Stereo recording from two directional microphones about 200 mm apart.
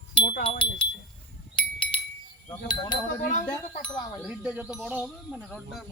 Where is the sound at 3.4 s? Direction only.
20° left (ahead or behind).